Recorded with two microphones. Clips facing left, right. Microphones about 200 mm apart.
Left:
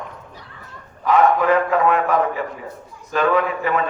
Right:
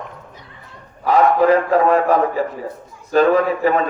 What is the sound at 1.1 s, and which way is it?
A man's voice, 35° right (ahead or behind).